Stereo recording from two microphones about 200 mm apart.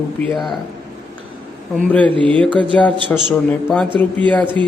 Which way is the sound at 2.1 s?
25° right (ahead or behind).